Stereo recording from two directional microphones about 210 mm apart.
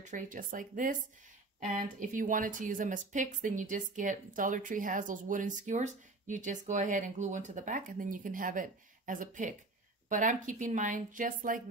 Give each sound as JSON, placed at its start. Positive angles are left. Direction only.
{"t": 0.0, "sound": "speech", "side_deg": -35}